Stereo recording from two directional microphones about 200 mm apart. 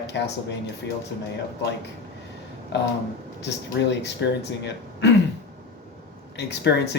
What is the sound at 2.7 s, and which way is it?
Speech, 60° left (ahead or behind).